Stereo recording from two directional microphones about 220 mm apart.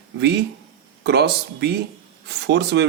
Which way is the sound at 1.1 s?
50° right (ahead or behind).